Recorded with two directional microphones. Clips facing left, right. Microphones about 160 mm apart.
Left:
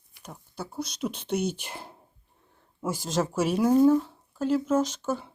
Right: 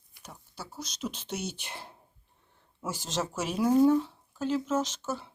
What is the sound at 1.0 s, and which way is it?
Speech, 55° left (ahead or behind).